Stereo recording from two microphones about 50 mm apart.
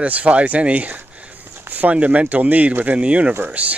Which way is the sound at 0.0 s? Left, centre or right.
Right.